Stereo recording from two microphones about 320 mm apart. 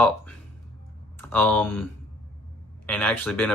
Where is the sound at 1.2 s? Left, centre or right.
Centre.